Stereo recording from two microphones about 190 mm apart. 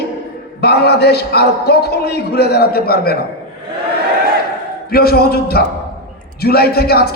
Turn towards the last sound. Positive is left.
turn(degrees=55)  # may be behind; listen again after turning